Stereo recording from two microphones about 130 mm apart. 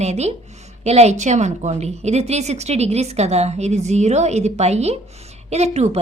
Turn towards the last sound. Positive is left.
turn(degrees=-55)  # may be behind; listen again after turning